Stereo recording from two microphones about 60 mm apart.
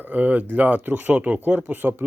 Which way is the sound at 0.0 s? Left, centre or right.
Right.